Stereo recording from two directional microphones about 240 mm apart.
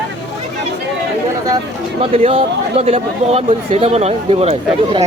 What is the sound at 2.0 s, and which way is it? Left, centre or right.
Speech, right.